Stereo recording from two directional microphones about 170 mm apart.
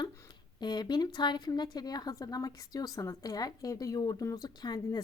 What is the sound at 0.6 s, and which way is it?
A woman's voice, 25° left (ahead or behind).